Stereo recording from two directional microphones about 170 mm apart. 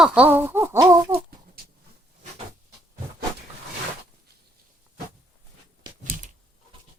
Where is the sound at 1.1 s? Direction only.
60° right (ahead or behind).